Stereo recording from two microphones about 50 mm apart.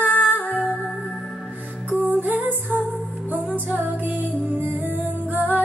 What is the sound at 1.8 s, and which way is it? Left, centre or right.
Music, right.